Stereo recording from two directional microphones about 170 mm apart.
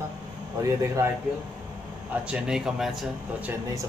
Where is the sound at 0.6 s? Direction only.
15° right (ahead or behind).